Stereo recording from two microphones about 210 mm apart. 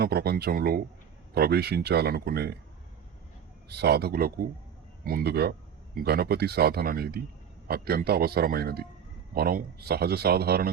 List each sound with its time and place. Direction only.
0.0 s speech: 50° right (ahead or behind)
3.7 s speech: 50° right (ahead or behind)